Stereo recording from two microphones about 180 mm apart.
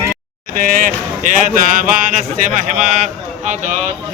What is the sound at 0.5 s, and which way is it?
Speech, 50° right (ahead or behind).